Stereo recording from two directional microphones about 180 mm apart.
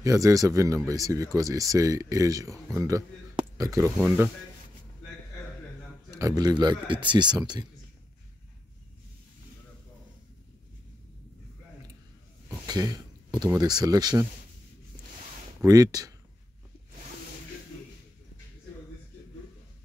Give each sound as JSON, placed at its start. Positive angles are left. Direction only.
{"t": 0.0, "sound": "speech", "side_deg": -20}
{"t": 6.0, "sound": "speech", "side_deg": -20}
{"t": 12.4, "sound": "speech", "side_deg": -20}
{"t": 15.6, "sound": "speech", "side_deg": -20}